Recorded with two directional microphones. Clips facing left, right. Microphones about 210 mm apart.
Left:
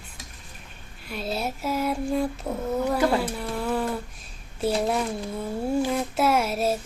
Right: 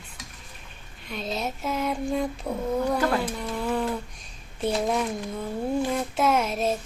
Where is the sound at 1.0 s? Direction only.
5° left (ahead or behind).